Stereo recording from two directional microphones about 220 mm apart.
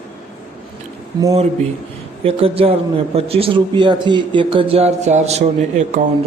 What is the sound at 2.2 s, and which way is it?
Speech, 25° right (ahead or behind).